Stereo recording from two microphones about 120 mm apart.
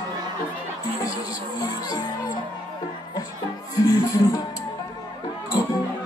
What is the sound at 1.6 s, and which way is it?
Music, 35° left (ahead or behind).